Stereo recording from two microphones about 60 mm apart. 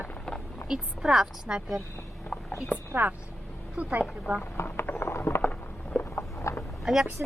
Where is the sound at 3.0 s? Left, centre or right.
Right.